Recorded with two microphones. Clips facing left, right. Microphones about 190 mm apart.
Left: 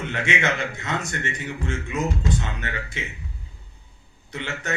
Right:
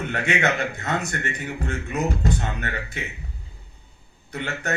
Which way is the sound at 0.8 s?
40° right (ahead or behind).